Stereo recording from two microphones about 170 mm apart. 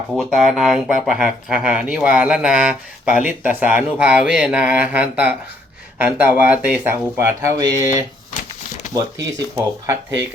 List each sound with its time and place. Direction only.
0.1 s speech: centre (ahead or behind); by 7.9 s 15° right (ahead or behind)
9.6 s speech: 15° right (ahead or behind)